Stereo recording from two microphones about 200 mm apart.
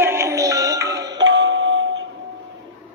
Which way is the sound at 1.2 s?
65° right (ahead or behind).